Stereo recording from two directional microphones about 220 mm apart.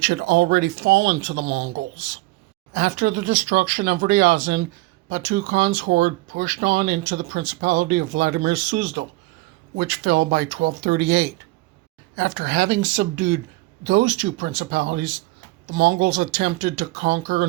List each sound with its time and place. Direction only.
0.0 s speech: 50° right (ahead or behind)
2.7 s speech: 45° right (ahead or behind)